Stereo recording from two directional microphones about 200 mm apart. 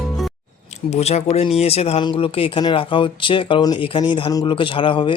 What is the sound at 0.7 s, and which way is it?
Speech, 30° left (ahead or behind).